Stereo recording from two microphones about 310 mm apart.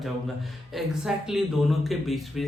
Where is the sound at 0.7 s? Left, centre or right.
Centre.